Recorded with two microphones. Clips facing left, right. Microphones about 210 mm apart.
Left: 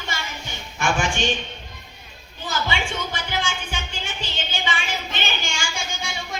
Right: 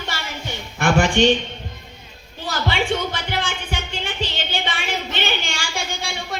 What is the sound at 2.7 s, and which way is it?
Music, 60° right (ahead or behind).